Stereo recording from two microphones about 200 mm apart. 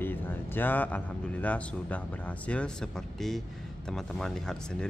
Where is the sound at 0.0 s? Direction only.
10° left (ahead or behind).